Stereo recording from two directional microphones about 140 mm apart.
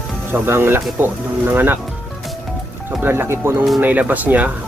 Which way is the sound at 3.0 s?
15° right (ahead or behind).